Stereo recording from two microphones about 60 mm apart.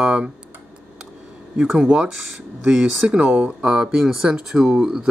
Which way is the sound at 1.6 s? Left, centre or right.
Centre.